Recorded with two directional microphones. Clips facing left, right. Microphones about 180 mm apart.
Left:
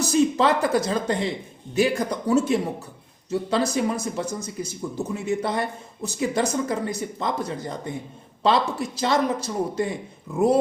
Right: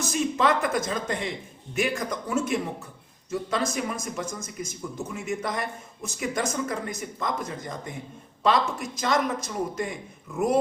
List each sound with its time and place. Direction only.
0.0 s speech: 35° left (ahead or behind)